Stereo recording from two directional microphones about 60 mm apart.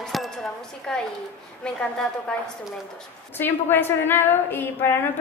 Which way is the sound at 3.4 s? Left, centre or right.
Left.